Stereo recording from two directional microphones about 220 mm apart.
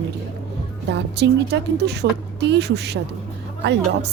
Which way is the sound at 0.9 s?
50° right (ahead or behind).